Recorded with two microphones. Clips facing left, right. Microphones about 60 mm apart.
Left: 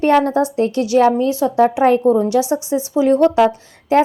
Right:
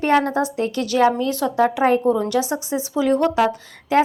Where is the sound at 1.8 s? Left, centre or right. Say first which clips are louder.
Left 4 dB; right.